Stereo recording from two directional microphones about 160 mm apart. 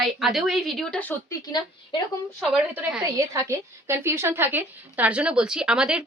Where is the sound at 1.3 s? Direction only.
25° left (ahead or behind).